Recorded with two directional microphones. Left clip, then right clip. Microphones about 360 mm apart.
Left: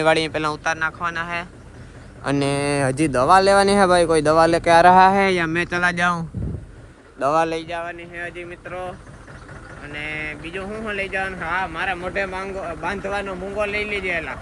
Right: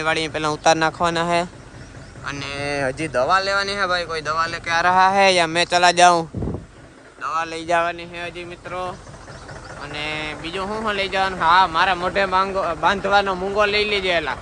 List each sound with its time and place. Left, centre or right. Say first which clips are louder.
0.0 s speech: left 3 dB; centre
2.2 s speech: left 5 dB; centre
7.2 s speech: left 5 dB; centre
7.7 s speech: right 9 dB; right
7.9 s speech: right 1 dB; centre
9.9 s speech: right 1 dB; centre